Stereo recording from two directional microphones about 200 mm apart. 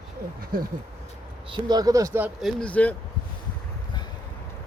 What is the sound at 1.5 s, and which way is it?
Speech, 20° right (ahead or behind).